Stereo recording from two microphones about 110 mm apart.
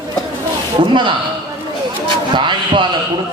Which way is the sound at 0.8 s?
45° right (ahead or behind).